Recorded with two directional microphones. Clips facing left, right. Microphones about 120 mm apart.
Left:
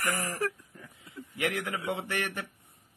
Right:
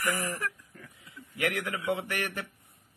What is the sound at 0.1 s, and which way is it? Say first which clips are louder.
A man's voice: left 1 dB; 35° left (ahead or behind).